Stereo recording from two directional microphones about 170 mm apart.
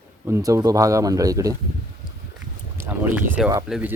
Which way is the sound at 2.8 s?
10° right (ahead or behind).